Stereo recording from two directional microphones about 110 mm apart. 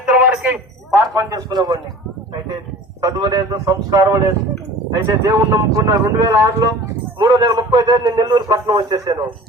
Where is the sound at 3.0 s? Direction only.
35° right (ahead or behind).